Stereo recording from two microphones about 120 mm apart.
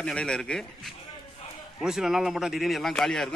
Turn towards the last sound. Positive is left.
turn(degrees=5)  # may be behind; listen again after turning